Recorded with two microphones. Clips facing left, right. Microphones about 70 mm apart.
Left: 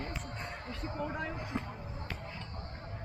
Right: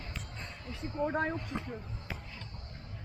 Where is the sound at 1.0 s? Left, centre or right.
Right.